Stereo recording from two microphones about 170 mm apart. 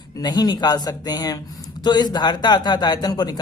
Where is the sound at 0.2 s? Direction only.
25° left (ahead or behind).